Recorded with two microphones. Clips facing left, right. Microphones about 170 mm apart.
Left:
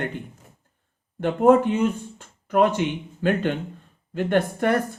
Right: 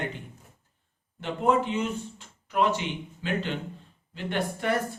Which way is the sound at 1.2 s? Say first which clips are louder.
Left 8 dB; 50° left (ahead or behind).